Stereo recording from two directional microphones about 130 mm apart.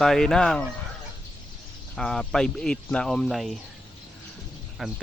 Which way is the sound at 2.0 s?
5° left (ahead or behind).